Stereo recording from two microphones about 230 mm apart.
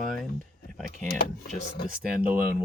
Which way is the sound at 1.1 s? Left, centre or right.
Left.